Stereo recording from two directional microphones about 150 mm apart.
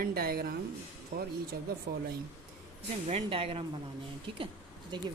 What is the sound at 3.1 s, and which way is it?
Speech, 40° right (ahead or behind).